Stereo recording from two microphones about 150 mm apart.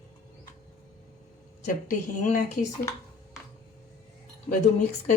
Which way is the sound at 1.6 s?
55° left (ahead or behind).